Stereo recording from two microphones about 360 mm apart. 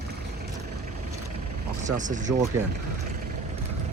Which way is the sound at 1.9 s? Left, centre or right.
Right.